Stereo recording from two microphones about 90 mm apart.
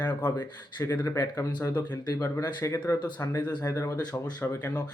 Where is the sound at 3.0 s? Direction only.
55° left (ahead or behind).